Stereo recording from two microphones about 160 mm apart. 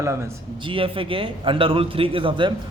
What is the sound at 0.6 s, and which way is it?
A man's voice, 35° right (ahead or behind).